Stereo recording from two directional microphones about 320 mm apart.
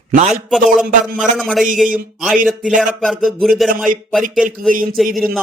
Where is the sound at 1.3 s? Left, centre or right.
Centre.